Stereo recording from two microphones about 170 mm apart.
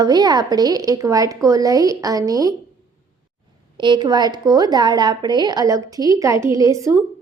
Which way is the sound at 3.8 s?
25° right (ahead or behind).